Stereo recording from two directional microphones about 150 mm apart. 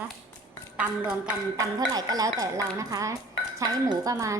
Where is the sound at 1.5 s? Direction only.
25° right (ahead or behind).